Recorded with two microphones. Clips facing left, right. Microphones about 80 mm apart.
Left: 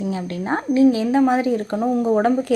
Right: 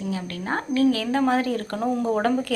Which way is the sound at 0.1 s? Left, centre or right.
Left.